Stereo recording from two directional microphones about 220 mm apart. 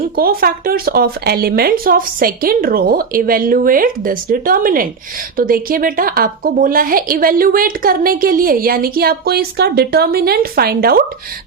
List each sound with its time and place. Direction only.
0.0 s a woman's voice: 40° right (ahead or behind)